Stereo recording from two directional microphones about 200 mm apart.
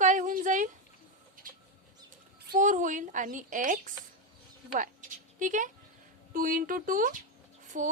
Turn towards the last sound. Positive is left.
turn(degrees=-40)  # may be behind; listen again after turning